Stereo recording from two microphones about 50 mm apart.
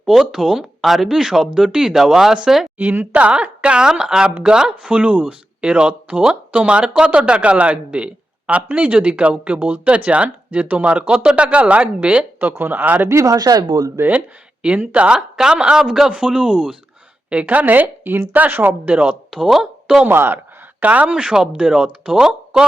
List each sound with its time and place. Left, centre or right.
0.0 s speech: centre
3.1 s a woman's voice: right
12.4 s a woman's voice: right
13.1 s speech: right
14.0 s speech: right
14.6 s speech: right; by 16.1 s centre
16.1 s speech: right
17.4 s a woman's voice: right
18.9 s a woman's voice: right
19.3 s speech: centre
20.1 s speech: right
20.8 s speech: right